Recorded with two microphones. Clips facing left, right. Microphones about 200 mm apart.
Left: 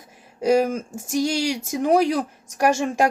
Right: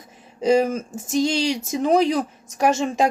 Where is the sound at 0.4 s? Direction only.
10° left (ahead or behind).